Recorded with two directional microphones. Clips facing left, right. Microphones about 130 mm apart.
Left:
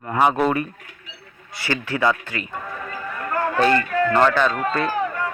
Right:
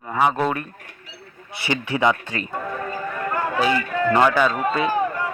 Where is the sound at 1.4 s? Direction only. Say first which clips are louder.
Even; 20° right (ahead or behind).